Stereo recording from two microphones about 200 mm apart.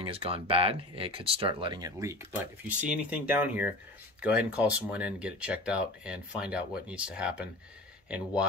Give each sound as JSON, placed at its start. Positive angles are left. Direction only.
{"t": 0.0, "sound": "speech", "side_deg": -25}